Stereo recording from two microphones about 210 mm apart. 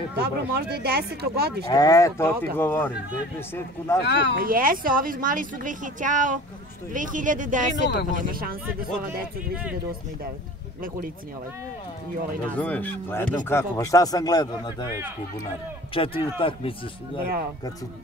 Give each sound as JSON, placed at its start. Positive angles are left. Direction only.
{"t": 0.1, "sound": "speech", "side_deg": -50}
{"t": 1.7, "sound": "speech", "side_deg": 15}
{"t": 4.0, "sound": "speech", "side_deg": 55}
{"t": 4.4, "sound": "speech", "side_deg": -40}
{"t": 12.5, "sound": "speech", "side_deg": 5}
{"t": 15.9, "sound": "speech", "side_deg": 25}